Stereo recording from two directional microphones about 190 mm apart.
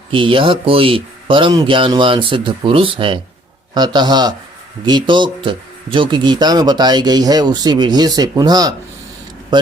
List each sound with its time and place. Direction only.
0.1 s speech: 25° right (ahead or behind)